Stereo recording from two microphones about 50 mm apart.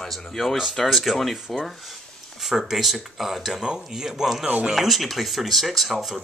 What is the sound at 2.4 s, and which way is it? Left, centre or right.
Speech, centre.